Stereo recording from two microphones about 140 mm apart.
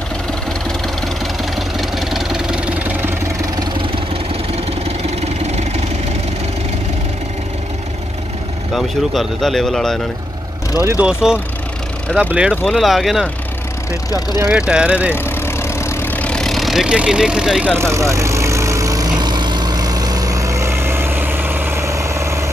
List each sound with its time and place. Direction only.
0.5 s engine: centre (ahead or behind)
5.5 s vehicle: 55° right (ahead or behind)
8.7 s speech: centre (ahead or behind)
10.8 s speech: 15° right (ahead or behind)
11.1 s speech: 5° right (ahead or behind)
14.7 s speech: 10° right (ahead or behind)
15.1 s vehicle: 15° left (ahead or behind); by 17.6 s 5° right (ahead or behind)
17.7 s vehicle: 20° right (ahead or behind)